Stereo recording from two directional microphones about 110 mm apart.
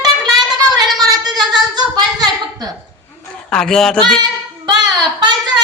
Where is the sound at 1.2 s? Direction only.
40° right (ahead or behind).